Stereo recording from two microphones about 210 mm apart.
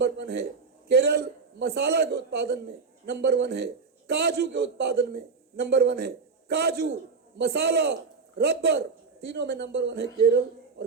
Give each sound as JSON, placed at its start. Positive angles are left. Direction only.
{"t": 0.0, "sound": "a man's voice", "side_deg": -50}